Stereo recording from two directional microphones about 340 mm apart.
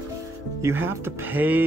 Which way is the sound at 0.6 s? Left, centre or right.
Centre.